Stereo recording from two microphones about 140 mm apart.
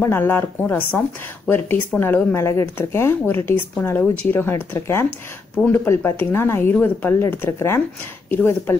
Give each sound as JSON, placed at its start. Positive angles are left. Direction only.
{"t": 0.0, "sound": "speech", "side_deg": 15}